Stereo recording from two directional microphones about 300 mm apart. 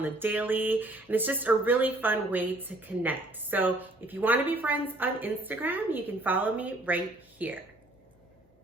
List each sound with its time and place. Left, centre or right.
0.0 s speech: centre